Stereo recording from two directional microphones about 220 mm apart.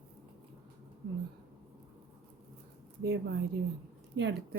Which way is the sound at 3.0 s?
45° right (ahead or behind).